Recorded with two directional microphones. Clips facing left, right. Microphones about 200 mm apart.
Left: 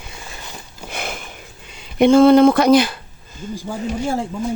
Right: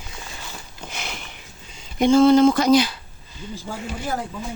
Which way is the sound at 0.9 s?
50° left (ahead or behind).